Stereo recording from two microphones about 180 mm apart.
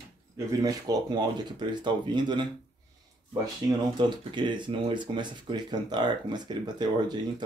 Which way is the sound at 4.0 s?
25° right (ahead or behind).